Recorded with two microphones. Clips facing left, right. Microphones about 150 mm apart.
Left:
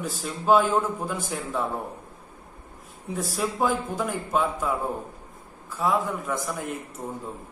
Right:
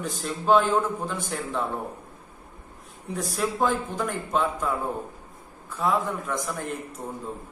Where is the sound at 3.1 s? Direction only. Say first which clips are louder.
Even; centre (ahead or behind).